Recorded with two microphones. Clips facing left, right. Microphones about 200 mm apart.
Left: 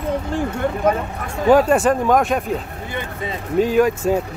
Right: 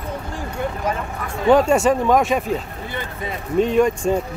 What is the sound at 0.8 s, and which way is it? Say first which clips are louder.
Speech: left 8 dB; 55° left (ahead or behind).